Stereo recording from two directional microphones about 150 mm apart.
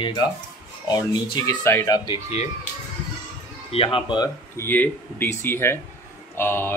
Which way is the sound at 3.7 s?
40° left (ahead or behind).